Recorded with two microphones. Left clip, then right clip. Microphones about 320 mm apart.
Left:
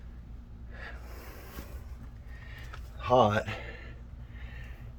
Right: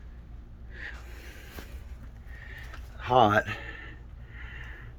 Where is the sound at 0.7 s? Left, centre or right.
Centre.